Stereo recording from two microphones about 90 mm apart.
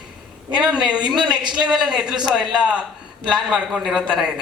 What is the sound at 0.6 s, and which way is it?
Speech, 5° right (ahead or behind).